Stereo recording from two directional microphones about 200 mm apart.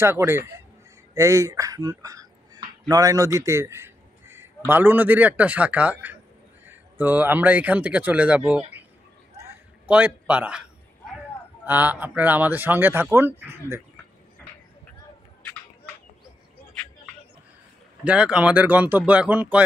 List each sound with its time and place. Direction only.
0.0 s a man's voice: 15° right (ahead or behind)
9.4 s a sound: 5° right (ahead or behind)
11.6 s a man's voice: 10° right (ahead or behind)
18.0 s a man's voice: 5° right (ahead or behind)